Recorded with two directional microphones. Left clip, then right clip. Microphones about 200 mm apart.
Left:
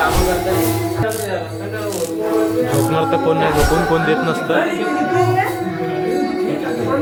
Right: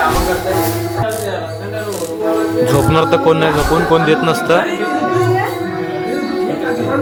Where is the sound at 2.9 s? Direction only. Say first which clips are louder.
Right 4 dB; 15° right (ahead or behind).